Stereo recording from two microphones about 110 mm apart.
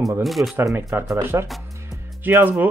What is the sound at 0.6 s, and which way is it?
Speech, 25° right (ahead or behind).